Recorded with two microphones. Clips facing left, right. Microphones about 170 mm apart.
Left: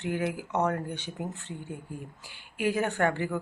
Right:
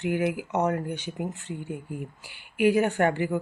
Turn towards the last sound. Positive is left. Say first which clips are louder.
# right 3 dB
turn(degrees=-15)  # may be behind; listen again after turning